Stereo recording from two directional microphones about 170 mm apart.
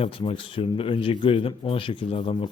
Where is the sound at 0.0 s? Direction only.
30° left (ahead or behind).